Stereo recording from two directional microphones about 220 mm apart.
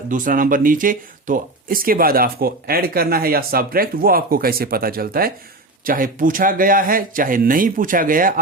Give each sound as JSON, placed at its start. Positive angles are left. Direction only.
{"t": 0.1, "sound": "speech", "side_deg": -40}